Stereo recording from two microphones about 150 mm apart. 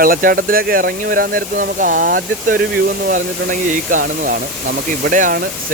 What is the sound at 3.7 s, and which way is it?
Speech, 60° right (ahead or behind).